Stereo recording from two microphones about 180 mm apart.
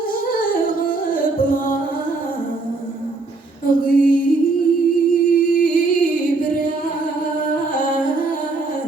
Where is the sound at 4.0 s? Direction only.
50° left (ahead or behind).